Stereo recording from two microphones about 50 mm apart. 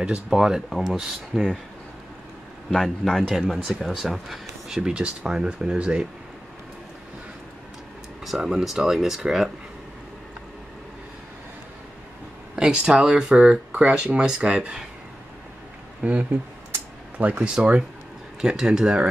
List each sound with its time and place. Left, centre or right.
0.3 s speech: centre
2.7 s a man's voice: centre
8.3 s speech: centre
12.5 s speech: centre
16.0 s speech: right
17.4 s speech: centre